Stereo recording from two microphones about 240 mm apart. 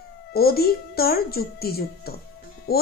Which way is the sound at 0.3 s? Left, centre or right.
Left.